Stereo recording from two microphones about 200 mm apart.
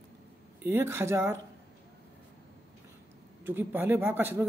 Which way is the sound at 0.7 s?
15° right (ahead or behind).